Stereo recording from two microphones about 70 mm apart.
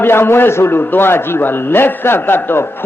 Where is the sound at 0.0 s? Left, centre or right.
Left.